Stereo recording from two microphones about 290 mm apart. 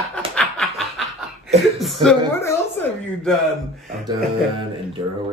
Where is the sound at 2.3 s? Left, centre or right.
Centre.